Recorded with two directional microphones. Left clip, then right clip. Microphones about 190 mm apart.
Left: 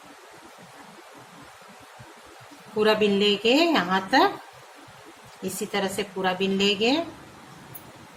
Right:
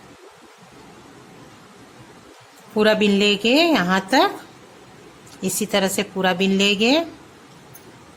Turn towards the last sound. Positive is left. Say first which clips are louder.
# right 5 dB
turn(degrees=-55)  # may be behind; listen again after turning